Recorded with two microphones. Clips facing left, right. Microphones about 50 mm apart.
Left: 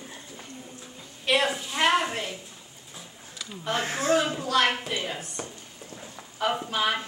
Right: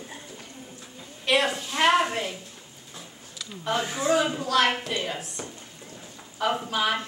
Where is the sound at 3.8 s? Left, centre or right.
Left.